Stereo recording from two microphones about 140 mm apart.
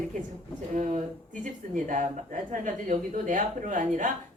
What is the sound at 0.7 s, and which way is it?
A woman's voice, 60° right (ahead or behind).